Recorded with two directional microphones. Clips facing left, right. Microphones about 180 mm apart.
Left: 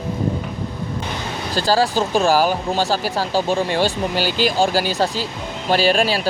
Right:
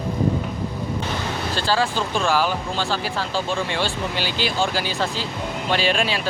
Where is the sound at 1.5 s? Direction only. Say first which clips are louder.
Left 5 dB; 40° left (ahead or behind).